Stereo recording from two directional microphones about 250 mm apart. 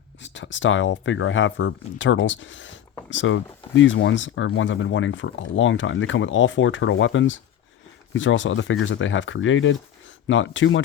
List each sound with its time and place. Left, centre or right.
0.2 s speech: left